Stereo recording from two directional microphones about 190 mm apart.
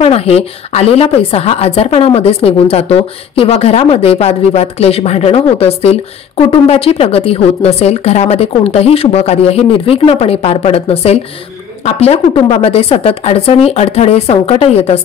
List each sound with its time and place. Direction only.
0.0 s a woman's voice: 30° left (ahead or behind)